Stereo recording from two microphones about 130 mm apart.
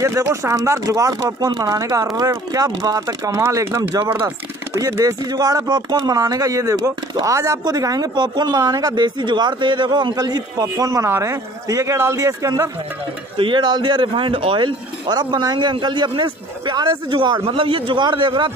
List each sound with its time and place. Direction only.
0.0 s speech: 20° right (ahead or behind)
4.7 s speech: 25° right (ahead or behind)
13.4 s speech: 35° right (ahead or behind)